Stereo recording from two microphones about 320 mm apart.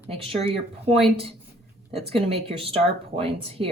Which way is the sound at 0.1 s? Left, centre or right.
Centre.